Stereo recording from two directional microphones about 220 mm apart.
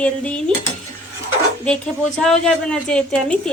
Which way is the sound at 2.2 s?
5° left (ahead or behind).